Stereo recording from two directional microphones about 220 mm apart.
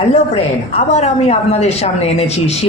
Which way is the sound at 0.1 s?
30° left (ahead or behind).